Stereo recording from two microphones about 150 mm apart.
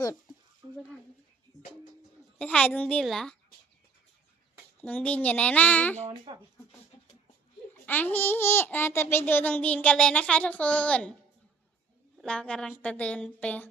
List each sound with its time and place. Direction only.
0.0 s a sound: 25° left (ahead or behind)
2.4 s a child's voice: 10° left (ahead or behind)
4.8 s a child's voice: 10° left (ahead or behind)
6.3 s speech: 30° right (ahead or behind)
7.7 s a child's voice: 10° left (ahead or behind)
12.1 s a child's voice: 5° left (ahead or behind)